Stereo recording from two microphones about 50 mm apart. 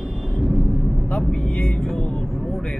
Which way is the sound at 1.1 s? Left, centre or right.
Centre.